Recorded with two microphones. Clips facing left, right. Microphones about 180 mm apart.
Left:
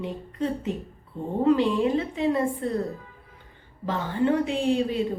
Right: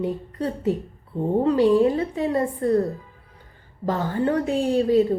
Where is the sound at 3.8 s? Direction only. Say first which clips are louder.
Right 1 dB; 40° right (ahead or behind).